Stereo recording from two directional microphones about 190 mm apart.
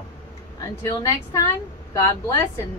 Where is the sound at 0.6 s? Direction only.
20° left (ahead or behind).